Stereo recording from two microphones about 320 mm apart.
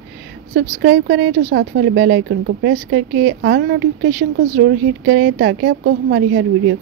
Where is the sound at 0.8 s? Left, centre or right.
Right.